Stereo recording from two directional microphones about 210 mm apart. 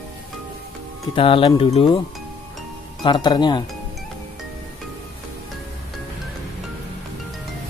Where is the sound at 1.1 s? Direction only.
25° left (ahead or behind).